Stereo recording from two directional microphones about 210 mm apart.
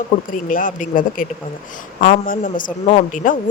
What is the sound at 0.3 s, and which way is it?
A man's voice, 40° left (ahead or behind).